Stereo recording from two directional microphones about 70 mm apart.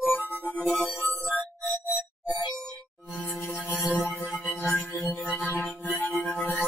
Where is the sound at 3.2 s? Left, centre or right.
Left.